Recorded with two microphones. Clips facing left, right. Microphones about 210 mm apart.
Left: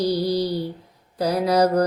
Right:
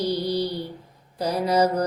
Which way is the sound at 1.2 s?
35° left (ahead or behind).